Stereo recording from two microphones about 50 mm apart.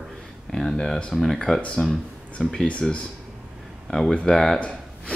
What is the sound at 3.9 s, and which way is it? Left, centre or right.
Speech, centre.